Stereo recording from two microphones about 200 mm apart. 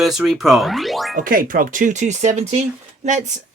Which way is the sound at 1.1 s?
45° right (ahead or behind).